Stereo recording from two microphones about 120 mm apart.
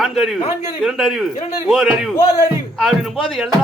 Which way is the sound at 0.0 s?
Centre (ahead or behind).